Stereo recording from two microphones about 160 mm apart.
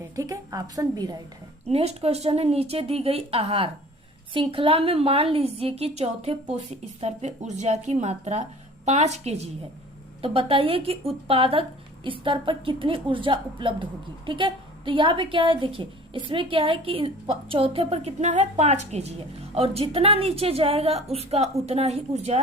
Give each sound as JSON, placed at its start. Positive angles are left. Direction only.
{"t": 0.2, "sound": "a woman's voice", "side_deg": -20}
{"t": 1.6, "sound": "a woman's voice", "side_deg": -40}